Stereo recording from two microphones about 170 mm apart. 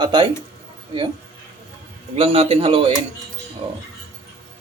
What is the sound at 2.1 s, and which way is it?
Speech, 35° right (ahead or behind).